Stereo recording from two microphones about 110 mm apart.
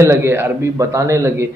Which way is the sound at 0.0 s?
25° right (ahead or behind).